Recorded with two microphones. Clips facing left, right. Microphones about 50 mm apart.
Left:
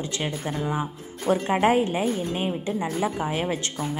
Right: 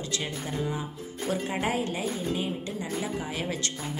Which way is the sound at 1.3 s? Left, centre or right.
Left.